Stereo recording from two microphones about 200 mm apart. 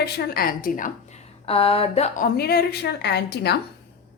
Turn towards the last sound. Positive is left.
turn(degrees=55)  # may be behind; listen again after turning